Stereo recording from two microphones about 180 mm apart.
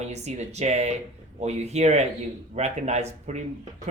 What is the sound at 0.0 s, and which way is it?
Speech, 40° right (ahead or behind).